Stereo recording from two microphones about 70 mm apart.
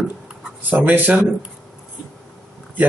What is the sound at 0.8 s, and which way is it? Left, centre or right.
Speech, right.